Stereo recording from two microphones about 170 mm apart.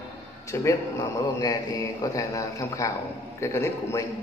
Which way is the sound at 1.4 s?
25° left (ahead or behind).